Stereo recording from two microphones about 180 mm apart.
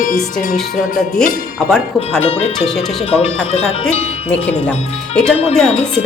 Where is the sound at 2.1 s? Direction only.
35° left (ahead or behind).